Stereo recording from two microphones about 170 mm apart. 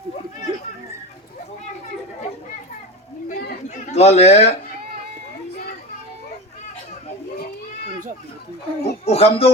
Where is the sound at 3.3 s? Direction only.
55° left (ahead or behind).